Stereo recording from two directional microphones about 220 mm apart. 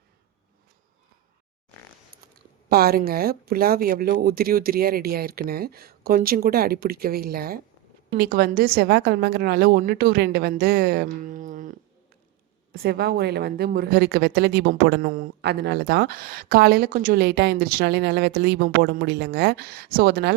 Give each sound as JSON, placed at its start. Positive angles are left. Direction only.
{"t": 2.2, "sound": "a woman's voice", "side_deg": -45}